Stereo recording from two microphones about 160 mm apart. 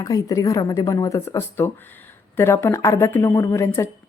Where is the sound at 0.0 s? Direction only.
20° left (ahead or behind).